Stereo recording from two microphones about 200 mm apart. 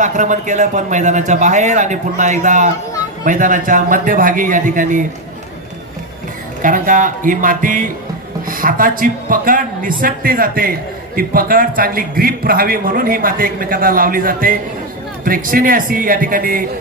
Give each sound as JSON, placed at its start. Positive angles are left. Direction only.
{"t": 0.0, "sound": "a man's voice", "side_deg": -40}
{"t": 6.6, "sound": "a man's voice", "side_deg": -40}